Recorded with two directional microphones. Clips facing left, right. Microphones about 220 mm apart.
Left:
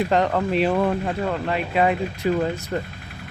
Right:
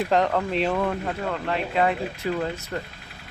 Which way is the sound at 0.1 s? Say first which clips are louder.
Left 2 dB; centre (ahead or behind).